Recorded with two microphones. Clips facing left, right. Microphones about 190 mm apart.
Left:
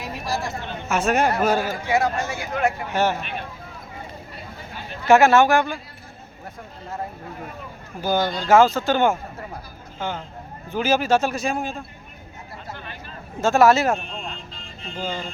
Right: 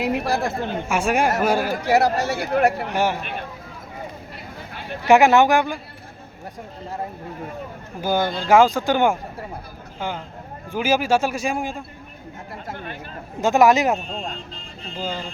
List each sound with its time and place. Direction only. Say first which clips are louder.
0.0 s a woman's voice: right 6 dB; 65° right (ahead or behind)
0.9 s speech: left 1 dB; 10° right (ahead or behind)
1.9 s speech: right 4 dB; 35° right (ahead or behind)
2.9 s speech: even; 10° right (ahead or behind)
5.0 s speech: right 1 dB; 15° right (ahead or behind)
8.0 s speech: even; 10° right (ahead or behind)
12.6 s a sound: right 4 dB; 50° right (ahead or behind)
13.4 s speech: right 1 dB; 15° right (ahead or behind)